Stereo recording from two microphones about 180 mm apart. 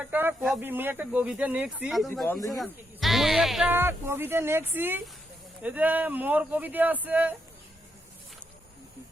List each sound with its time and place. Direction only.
0.0 s speech: 10° right (ahead or behind)
2.2 s speech: 10° left (ahead or behind)
2.6 s speech: centre (ahead or behind)